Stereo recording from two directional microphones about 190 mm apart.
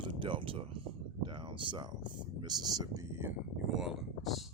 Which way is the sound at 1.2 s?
25° right (ahead or behind).